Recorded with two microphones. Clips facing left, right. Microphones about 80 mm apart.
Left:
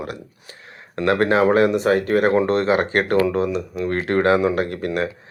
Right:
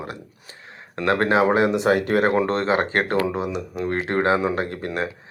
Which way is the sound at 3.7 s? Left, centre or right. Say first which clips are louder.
Left 1 dB; right.